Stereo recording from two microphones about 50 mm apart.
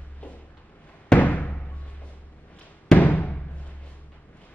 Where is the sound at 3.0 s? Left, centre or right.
Left.